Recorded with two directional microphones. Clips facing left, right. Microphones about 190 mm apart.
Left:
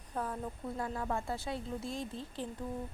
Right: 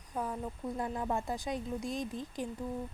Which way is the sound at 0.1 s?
10° right (ahead or behind).